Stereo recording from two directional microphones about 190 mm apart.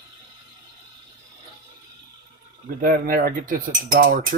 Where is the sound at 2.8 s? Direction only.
50° right (ahead or behind).